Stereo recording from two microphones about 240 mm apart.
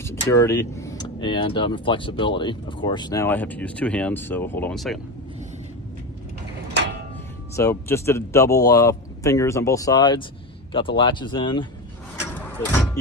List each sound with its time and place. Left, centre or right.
0.0 s speech: centre
7.5 s speech: centre
12.2 s a sound: centre